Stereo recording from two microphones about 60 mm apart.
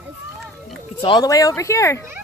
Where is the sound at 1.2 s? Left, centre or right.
Left.